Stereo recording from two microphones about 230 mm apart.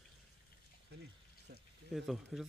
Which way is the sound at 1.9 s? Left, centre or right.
Centre.